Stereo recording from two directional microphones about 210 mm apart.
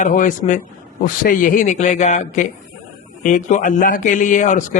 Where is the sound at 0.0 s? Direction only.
40° left (ahead or behind).